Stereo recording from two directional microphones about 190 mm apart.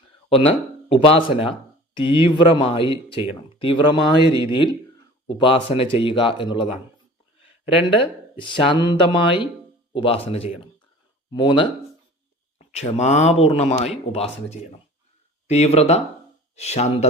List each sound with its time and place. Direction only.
0.3 s speech: 30° left (ahead or behind)
5.4 s speech: 30° left (ahead or behind)
7.8 s speech: 30° left (ahead or behind)
12.5 s speech: 35° left (ahead or behind)